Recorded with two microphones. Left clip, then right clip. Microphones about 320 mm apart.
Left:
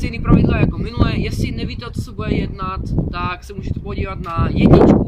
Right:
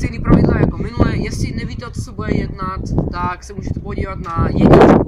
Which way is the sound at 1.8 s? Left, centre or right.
Centre.